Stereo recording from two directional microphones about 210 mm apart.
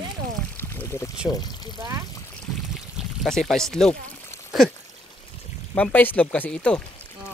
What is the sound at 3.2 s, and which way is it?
Speech, centre (ahead or behind).